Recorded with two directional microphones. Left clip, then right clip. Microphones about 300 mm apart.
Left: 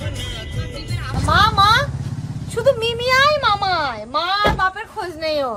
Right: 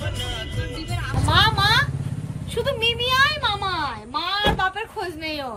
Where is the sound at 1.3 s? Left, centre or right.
Centre.